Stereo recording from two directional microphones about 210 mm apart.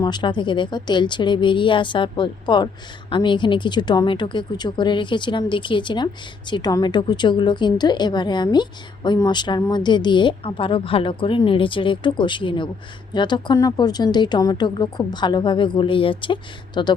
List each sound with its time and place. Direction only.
0.0 s a woman's voice: 20° left (ahead or behind)